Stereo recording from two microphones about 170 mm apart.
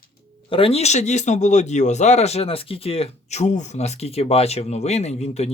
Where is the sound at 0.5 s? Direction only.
35° left (ahead or behind).